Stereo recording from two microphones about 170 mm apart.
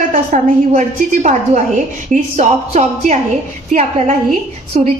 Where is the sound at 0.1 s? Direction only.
45° right (ahead or behind).